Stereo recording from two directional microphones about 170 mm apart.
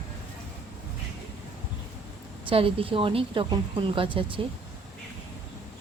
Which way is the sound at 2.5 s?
30° right (ahead or behind).